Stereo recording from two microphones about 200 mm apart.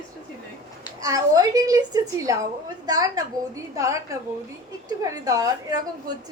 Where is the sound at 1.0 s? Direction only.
20° right (ahead or behind).